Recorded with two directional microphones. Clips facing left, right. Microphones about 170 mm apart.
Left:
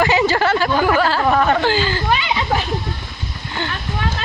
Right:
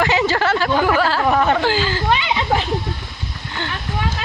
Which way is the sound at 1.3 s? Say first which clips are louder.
Even; 15° right (ahead or behind).